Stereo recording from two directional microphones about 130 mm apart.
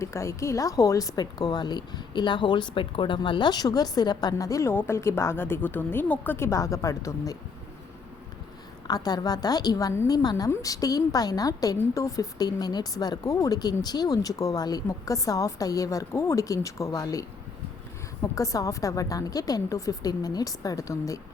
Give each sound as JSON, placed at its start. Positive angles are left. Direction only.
{"t": 0.0, "sound": "a woman's voice", "side_deg": 20}
{"t": 8.9, "sound": "a woman's voice", "side_deg": 30}